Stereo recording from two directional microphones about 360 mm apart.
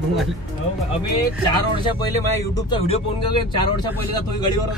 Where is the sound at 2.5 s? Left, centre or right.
Centre.